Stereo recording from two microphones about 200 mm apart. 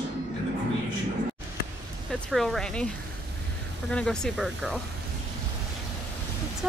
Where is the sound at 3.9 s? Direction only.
5° left (ahead or behind).